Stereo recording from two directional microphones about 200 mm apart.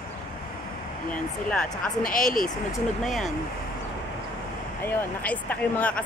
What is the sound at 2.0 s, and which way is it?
Speech, 45° left (ahead or behind).